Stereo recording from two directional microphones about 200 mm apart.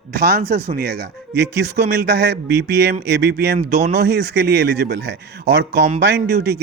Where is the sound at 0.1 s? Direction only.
55° right (ahead or behind).